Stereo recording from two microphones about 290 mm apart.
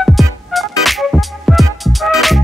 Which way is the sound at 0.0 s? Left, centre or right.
Centre.